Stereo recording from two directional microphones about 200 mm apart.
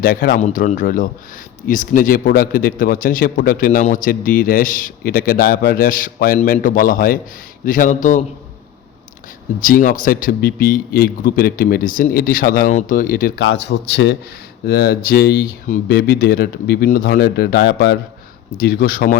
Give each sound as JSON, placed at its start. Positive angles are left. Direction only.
{"t": 0.0, "sound": "a man's voice", "side_deg": 45}
{"t": 9.6, "sound": "a man's voice", "side_deg": 40}
{"t": 13.4, "sound": "a man's voice", "side_deg": 60}